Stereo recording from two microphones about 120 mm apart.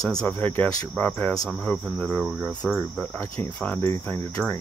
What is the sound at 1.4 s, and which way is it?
Speech, 5° left (ahead or behind).